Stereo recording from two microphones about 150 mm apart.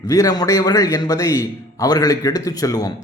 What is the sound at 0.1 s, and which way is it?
A man's voice, 25° left (ahead or behind).